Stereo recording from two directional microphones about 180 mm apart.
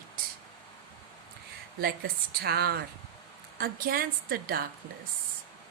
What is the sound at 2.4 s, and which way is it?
A woman's voice, 60° right (ahead or behind).